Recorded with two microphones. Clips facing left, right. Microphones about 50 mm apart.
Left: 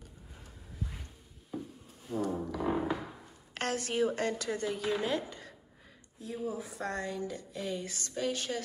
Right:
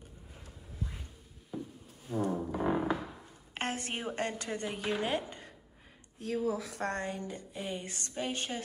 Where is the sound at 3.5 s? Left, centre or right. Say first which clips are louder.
Left 5 dB; right.